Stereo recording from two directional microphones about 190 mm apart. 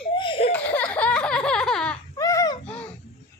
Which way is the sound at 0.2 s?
30° left (ahead or behind).